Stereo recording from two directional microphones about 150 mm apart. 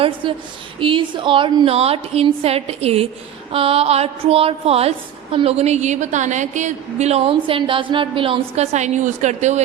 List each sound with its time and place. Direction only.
0.2 s a woman's voice: 35° right (ahead or behind); by 9.6 s 50° right (ahead or behind)